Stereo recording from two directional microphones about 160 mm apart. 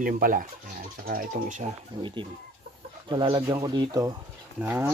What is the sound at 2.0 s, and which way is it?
Speech, 30° right (ahead or behind).